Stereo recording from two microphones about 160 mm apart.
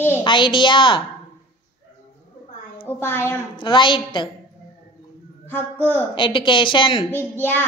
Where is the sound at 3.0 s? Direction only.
15° left (ahead or behind).